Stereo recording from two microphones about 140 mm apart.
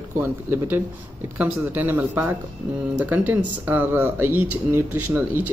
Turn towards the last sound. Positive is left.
turn(degrees=-15)  # may be behind; listen again after turning